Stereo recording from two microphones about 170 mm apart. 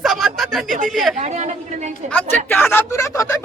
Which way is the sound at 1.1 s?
40° right (ahead or behind).